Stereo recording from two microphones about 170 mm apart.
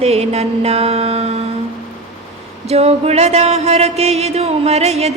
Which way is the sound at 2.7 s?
40° right (ahead or behind).